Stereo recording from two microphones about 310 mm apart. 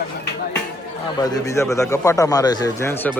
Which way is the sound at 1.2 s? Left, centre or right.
Centre.